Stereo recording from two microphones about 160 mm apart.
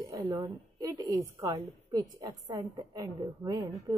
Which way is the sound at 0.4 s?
20° right (ahead or behind).